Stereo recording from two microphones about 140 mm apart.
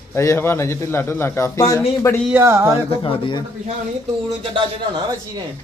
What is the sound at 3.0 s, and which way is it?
Speech, 35° left (ahead or behind).